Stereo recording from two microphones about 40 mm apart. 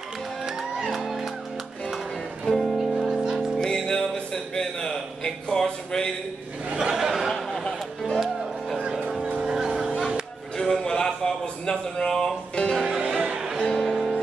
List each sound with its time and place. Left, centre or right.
0.5 s music: centre
2.4 s music: centre
3.5 s music: centre
5.2 s a sound: centre
6.9 s a sound: centre
8.0 s music: centre
9.4 s vehicle: centre
10.6 s a sound: centre
12.1 s music: centre
12.9 s music: centre
13.6 s music: centre